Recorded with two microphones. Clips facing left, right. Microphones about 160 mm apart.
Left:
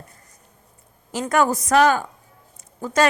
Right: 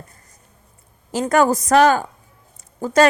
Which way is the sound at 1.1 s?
35° right (ahead or behind).